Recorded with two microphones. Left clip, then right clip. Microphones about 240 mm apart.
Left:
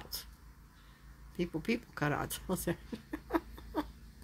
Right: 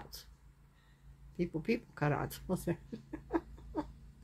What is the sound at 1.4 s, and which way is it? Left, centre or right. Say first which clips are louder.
Speech: even; centre.